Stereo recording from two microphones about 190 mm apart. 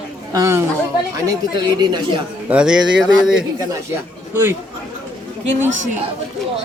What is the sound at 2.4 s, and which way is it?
Speech, 5° right (ahead or behind).